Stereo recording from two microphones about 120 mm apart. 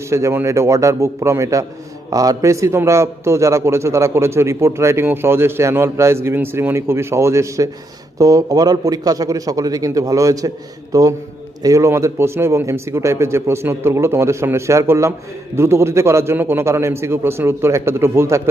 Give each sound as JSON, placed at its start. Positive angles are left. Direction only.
{"t": 0.1, "sound": "a man's voice", "side_deg": -25}